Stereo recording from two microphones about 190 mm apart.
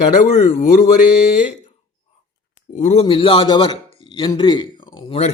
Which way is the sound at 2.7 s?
35° left (ahead or behind).